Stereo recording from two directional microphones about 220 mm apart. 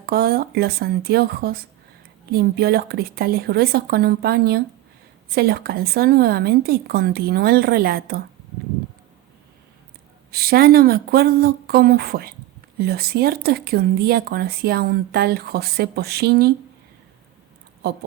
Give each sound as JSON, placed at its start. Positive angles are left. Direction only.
{"t": 0.0, "sound": "speech", "side_deg": -45}
{"t": 10.3, "sound": "speech", "side_deg": -45}